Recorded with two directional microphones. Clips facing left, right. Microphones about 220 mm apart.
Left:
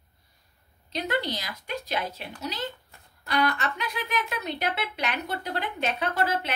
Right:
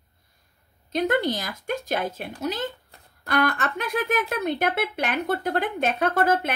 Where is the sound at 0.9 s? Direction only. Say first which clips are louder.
Right 6 dB; 50° right (ahead or behind).